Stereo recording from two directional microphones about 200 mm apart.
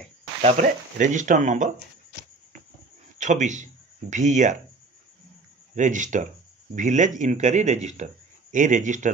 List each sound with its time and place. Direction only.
0.4 s a man's voice: 35° right (ahead or behind)
3.2 s a man's voice: 35° right (ahead or behind)
5.8 s a man's voice: 40° right (ahead or behind)